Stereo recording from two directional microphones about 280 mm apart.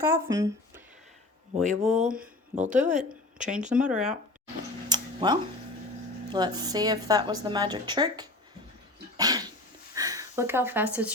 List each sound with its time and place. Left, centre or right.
0.0 s speech: centre
1.5 s speech: centre
2.1 s speech: right
3.7 s speech: centre
4.9 s a sound: centre
6.3 s a woman's voice: centre
9.1 s cough: centre
9.9 s speech: centre